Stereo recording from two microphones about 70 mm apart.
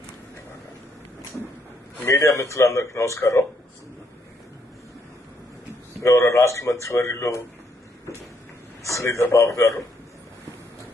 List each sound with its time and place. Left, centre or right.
2.0 s speech: left
6.0 s speech: left
8.8 s speech: left